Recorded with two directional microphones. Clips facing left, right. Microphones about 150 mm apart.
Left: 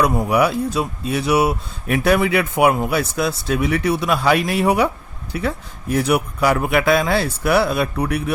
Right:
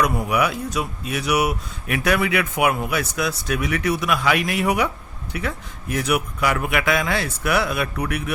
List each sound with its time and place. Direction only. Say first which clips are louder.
0.0 s speech: left 4 dB; 30° left (ahead or behind)